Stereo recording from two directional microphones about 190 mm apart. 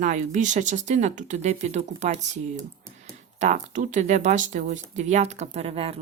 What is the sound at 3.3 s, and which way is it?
Speech, 40° right (ahead or behind).